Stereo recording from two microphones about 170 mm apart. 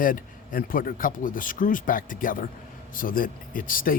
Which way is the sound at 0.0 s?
55° left (ahead or behind).